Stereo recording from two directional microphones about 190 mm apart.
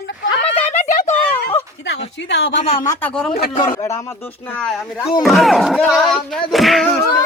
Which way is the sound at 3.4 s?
40° left (ahead or behind).